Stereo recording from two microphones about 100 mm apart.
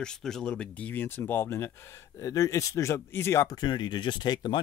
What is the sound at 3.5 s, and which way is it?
Speech, 50° left (ahead or behind).